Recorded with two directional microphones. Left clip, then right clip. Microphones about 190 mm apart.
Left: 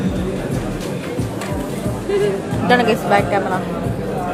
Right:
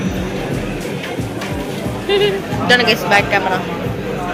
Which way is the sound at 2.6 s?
50° left (ahead or behind).